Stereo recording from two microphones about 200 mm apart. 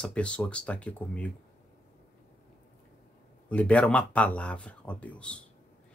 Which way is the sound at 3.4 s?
5° left (ahead or behind).